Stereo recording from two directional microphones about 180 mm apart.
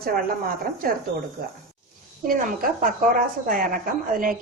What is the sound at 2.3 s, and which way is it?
A woman's voice, 50° right (ahead or behind).